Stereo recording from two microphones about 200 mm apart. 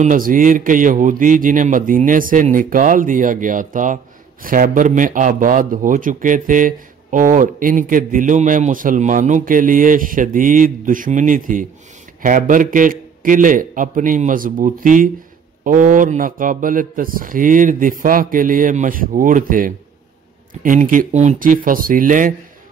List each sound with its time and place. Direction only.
0.0 s speech: 40° right (ahead or behind)